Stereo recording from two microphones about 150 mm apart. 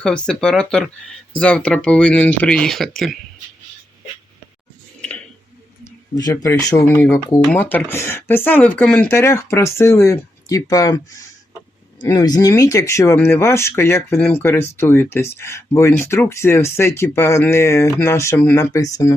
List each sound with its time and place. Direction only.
0.0 s speech: 5° left (ahead or behind)
6.1 s speech: 25° left (ahead or behind)